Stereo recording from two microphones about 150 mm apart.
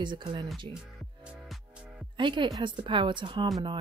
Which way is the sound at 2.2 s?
30° right (ahead or behind).